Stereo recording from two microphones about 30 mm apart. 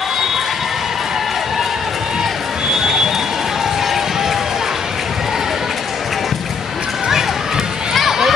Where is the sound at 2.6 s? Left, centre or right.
Centre.